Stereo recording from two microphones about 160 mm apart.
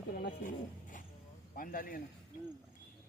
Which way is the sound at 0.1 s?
65° left (ahead or behind).